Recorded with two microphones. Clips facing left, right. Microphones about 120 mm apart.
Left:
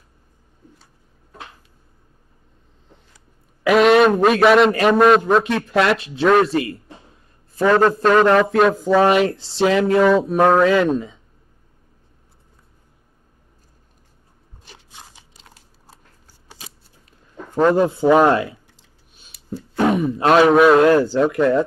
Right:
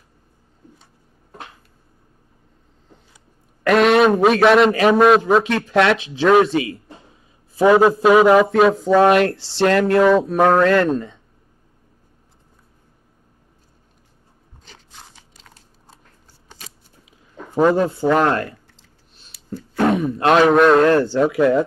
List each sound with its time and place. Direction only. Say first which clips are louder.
3.6 s a man's voice: left 1 dB; centre (ahead or behind)
14.7 s crunch: left 1 dB; 10° left (ahead or behind)
17.0 s a sound: left 1 dB; 10° right (ahead or behind)
17.7 s speech: left 3 dB; 15° left (ahead or behind); by 21.6 s 5° right (ahead or behind)